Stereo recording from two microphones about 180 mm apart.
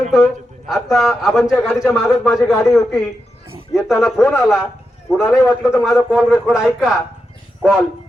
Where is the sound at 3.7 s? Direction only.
Centre (ahead or behind).